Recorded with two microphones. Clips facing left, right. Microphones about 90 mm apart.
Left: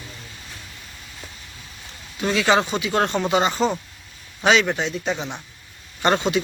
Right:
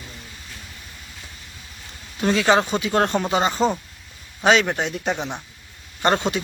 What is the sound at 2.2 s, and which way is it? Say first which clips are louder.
Speech: right 1 dB; 40° right (ahead or behind).